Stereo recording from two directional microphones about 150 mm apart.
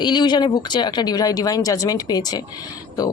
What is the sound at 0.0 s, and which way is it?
Speech, 30° left (ahead or behind).